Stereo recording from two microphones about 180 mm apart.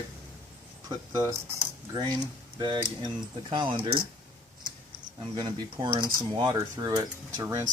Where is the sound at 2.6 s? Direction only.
25° right (ahead or behind).